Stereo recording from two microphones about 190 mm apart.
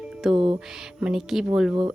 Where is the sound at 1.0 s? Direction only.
Centre (ahead or behind).